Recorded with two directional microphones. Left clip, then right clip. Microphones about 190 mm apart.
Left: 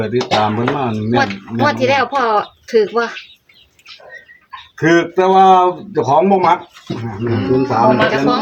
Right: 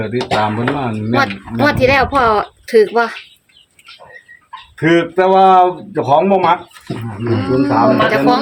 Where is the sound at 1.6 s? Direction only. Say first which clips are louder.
Right 2 dB; 45° right (ahead or behind).